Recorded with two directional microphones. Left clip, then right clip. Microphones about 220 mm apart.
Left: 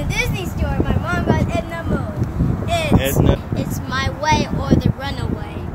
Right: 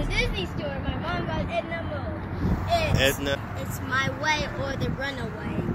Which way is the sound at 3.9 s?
25° left (ahead or behind).